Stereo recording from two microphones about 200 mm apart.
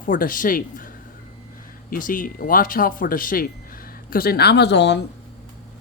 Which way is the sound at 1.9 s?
45° left (ahead or behind).